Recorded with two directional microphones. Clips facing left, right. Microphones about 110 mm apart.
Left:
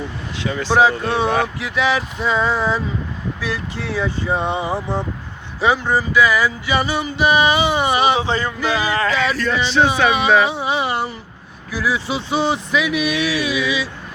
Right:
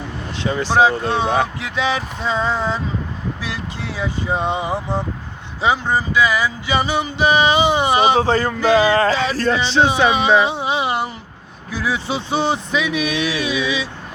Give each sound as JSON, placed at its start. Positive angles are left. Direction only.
{"t": 0.6, "sound": "speech", "side_deg": -20}
{"t": 8.2, "sound": "a sound", "side_deg": -45}
{"t": 8.8, "sound": "speech", "side_deg": -30}